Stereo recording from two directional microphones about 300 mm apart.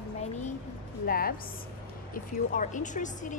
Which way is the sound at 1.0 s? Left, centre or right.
Left.